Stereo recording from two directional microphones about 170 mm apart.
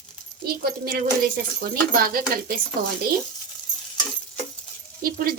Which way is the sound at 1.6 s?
60° right (ahead or behind).